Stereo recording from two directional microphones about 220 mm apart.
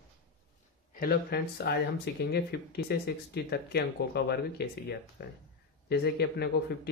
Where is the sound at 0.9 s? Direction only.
45° left (ahead or behind).